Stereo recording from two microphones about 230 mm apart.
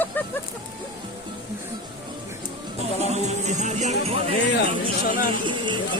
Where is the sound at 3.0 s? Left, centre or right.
Right.